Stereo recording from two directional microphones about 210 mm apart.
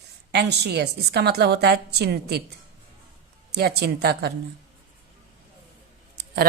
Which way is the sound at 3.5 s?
50° right (ahead or behind).